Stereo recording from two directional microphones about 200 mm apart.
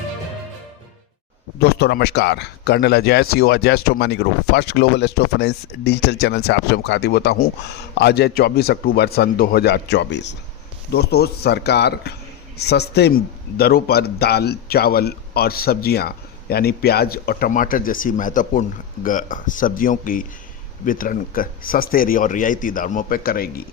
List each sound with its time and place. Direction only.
1.5 s speech: 55° left (ahead or behind)